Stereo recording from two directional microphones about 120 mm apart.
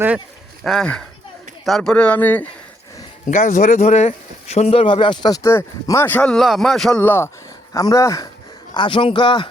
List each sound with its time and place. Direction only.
0.6 s speech: 5° left (ahead or behind)
3.2 s speech: 85° left; by 5.4 s 40° left (ahead or behind)
5.4 s speech: 20° left (ahead or behind); by 7.0 s centre (ahead or behind)
7.0 s speech: 15° left (ahead or behind)
7.7 s speech: 30° left (ahead or behind)
8.7 s speech: 40° left (ahead or behind)